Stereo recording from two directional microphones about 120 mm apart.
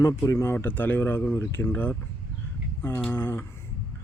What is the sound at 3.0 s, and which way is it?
Speech, 15° left (ahead or behind).